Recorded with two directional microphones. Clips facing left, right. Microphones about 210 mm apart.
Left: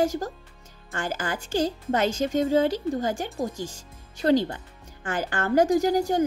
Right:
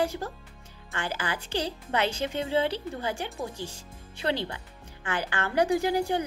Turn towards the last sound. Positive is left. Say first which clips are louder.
# left 4 dB
turn(degrees=45)  # may be behind; listen again after turning